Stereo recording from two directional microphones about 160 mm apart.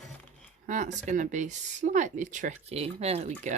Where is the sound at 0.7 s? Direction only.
50° right (ahead or behind).